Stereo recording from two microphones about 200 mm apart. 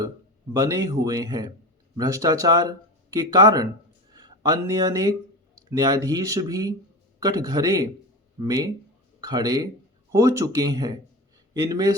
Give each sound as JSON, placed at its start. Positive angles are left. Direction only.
{"t": 0.5, "sound": "speech", "side_deg": -20}